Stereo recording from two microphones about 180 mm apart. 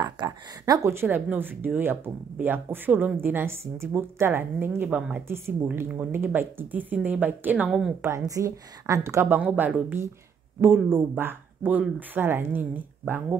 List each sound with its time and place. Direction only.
0.0 s speech: 20° right (ahead or behind)